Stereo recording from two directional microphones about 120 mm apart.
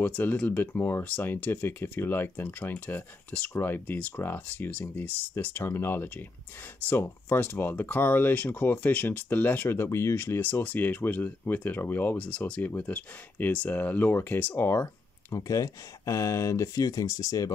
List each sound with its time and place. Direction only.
0.0 s speech: 15° left (ahead or behind)